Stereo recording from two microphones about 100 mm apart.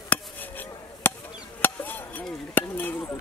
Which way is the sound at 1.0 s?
20° left (ahead or behind).